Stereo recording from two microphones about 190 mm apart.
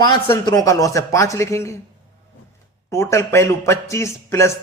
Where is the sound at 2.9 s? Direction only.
15° left (ahead or behind).